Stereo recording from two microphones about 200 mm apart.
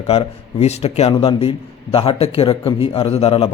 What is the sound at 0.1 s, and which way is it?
A man's voice, 30° left (ahead or behind).